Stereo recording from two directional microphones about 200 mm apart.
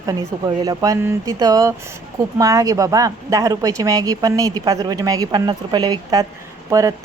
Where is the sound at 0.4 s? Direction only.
20° right (ahead or behind).